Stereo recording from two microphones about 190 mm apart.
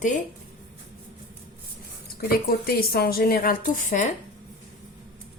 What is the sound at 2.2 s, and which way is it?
A woman's voice, 55° left (ahead or behind).